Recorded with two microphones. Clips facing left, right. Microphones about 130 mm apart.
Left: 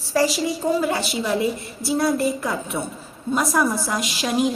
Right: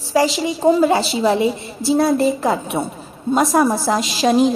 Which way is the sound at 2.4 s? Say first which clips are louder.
Right 6 dB; 35° right (ahead or behind).